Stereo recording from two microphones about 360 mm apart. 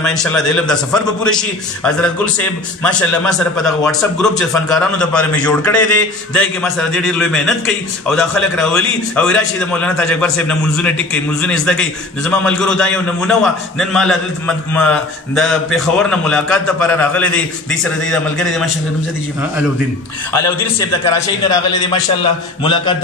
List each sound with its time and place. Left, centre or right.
0.0 s speech: centre
2.8 s speech: centre
22.2 s a man's voice: centre